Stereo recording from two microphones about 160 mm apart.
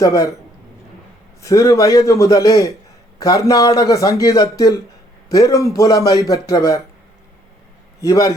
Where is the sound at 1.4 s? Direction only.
20° left (ahead or behind).